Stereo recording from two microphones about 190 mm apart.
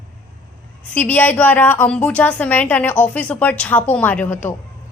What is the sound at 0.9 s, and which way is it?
A woman's voice, 10° left (ahead or behind).